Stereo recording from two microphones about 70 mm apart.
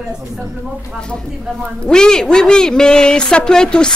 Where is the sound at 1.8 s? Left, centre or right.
Centre.